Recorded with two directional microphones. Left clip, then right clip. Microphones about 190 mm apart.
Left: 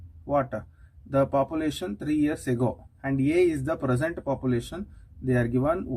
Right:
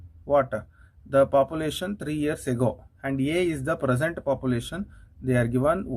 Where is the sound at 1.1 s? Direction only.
25° right (ahead or behind).